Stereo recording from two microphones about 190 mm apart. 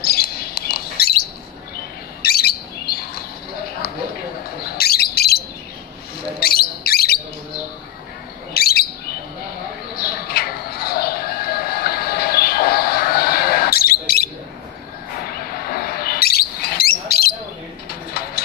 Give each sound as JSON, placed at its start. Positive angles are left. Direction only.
{"t": 0.0, "sound": "bird", "side_deg": 55}
{"t": 2.2, "sound": "bird", "side_deg": 55}
{"t": 4.6, "sound": "bird", "side_deg": 55}
{"t": 6.4, "sound": "a sound", "side_deg": 55}
{"t": 8.5, "sound": "bird", "side_deg": 55}
{"t": 9.9, "sound": "music", "side_deg": 55}
{"t": 15.2, "sound": "bird", "side_deg": 55}